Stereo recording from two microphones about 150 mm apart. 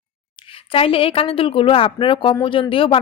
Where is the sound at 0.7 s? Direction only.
35° left (ahead or behind).